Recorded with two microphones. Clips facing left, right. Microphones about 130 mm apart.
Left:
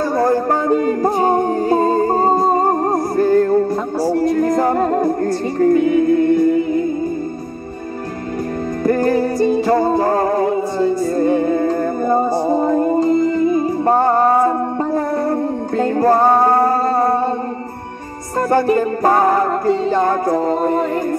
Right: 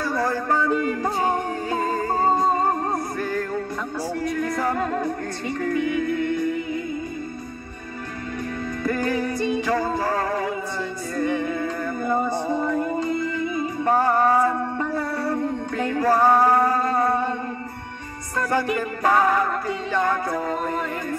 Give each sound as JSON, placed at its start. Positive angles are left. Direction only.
{"t": 0.1, "sound": "music", "side_deg": 45}
{"t": 8.8, "sound": "music", "side_deg": 40}
{"t": 13.9, "sound": "music", "side_deg": 25}
{"t": 15.2, "sound": "music", "side_deg": 40}
{"t": 16.1, "sound": "music", "side_deg": 25}
{"t": 16.4, "sound": "a sound", "side_deg": 35}
{"t": 18.5, "sound": "music", "side_deg": 40}